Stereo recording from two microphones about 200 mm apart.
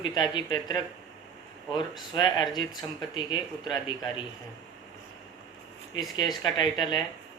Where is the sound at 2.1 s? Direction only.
20° left (ahead or behind).